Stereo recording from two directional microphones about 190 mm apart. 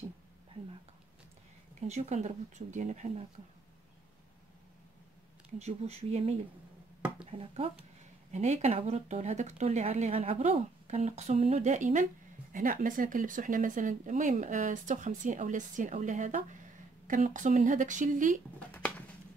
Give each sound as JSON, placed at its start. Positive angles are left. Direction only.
{"t": 1.8, "sound": "speech", "side_deg": -35}
{"t": 5.6, "sound": "speech", "side_deg": -35}
{"t": 18.6, "sound": "a sound", "side_deg": 5}